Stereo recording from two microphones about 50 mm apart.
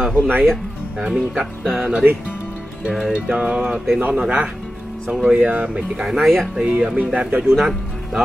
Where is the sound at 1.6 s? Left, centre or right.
Centre.